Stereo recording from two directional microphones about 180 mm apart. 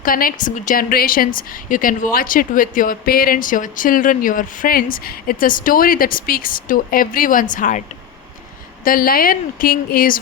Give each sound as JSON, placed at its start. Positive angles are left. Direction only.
{"t": 0.0, "sound": "speech", "side_deg": 55}